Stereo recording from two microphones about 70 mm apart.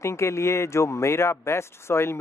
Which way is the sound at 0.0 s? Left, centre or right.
Left.